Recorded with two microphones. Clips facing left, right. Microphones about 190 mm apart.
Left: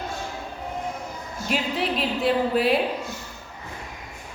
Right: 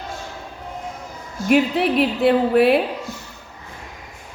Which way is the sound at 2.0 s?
60° right (ahead or behind).